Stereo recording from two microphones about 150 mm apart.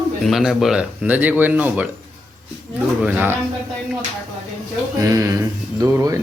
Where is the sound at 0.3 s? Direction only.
Centre (ahead or behind).